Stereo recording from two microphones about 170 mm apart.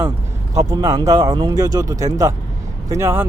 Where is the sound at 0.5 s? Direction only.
20° right (ahead or behind).